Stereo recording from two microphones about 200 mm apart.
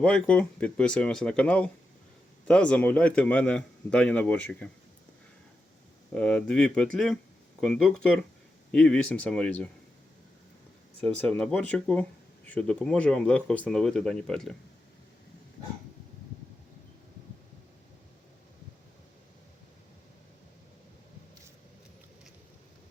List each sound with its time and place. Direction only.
0.0 s speech: 5° left (ahead or behind)
6.1 s speech: 5° left (ahead or behind)
11.0 s speech: 5° left (ahead or behind)